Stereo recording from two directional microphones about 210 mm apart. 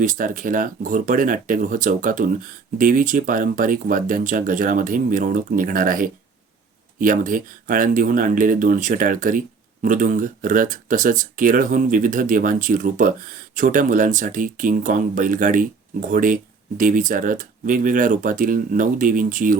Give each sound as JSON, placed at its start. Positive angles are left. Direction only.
{"t": 0.0, "sound": "speech", "side_deg": -40}